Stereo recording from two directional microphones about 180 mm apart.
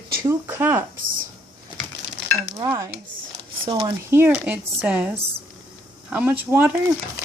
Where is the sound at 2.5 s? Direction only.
20° right (ahead or behind).